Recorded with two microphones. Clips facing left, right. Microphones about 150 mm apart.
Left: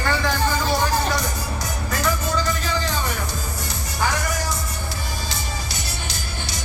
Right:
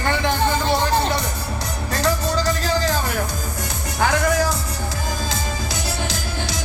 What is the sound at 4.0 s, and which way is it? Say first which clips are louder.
Music: right 6 dB; 60° right (ahead or behind).